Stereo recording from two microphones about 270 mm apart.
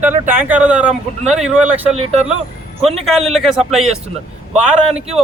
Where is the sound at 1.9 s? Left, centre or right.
Right.